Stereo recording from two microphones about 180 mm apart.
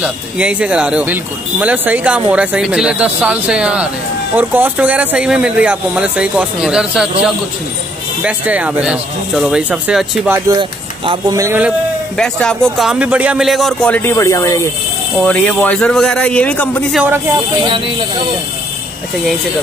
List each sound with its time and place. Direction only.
0.0 s speech: 5° right (ahead or behind)
8.2 s speech: 5° right (ahead or behind)
10.5 s speech: 25° right (ahead or behind)
12.2 s a man's voice: 5° left (ahead or behind)
15.2 s a man's voice: 5° left (ahead or behind)
16.9 s speech: 10° right (ahead or behind)
17.6 s speech: 30° right (ahead or behind)